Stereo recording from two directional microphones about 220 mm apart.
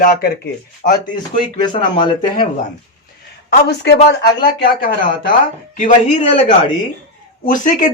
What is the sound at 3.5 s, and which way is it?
Speech, 50° left (ahead or behind).